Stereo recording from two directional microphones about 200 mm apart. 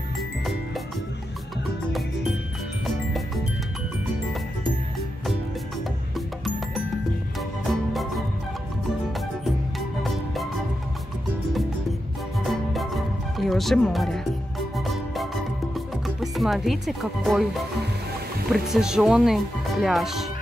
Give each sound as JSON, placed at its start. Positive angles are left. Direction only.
{"t": 6.1, "sound": "music", "side_deg": 0}
{"t": 9.4, "sound": "music", "side_deg": 0}
{"t": 12.4, "sound": "music", "side_deg": 0}
{"t": 18.5, "sound": "speech", "side_deg": 0}